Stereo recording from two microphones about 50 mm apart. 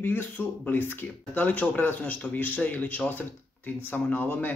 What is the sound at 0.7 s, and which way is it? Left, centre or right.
A man's voice, left.